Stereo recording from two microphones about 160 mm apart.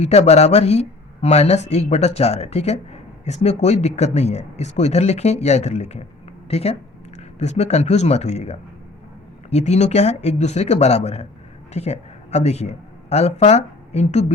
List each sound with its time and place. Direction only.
0.0 s speech: 40° left (ahead or behind)